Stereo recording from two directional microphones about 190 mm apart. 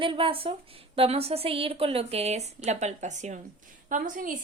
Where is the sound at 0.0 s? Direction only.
25° right (ahead or behind).